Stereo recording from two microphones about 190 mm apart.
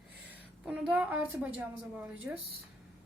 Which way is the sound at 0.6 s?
10° right (ahead or behind).